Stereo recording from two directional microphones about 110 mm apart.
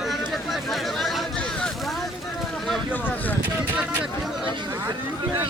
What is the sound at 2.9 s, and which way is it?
Speech, 15° left (ahead or behind).